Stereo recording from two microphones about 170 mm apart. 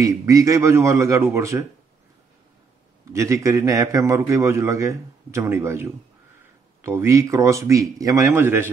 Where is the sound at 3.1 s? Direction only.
15° right (ahead or behind).